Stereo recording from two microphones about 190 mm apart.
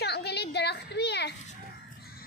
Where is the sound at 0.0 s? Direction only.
60° left (ahead or behind).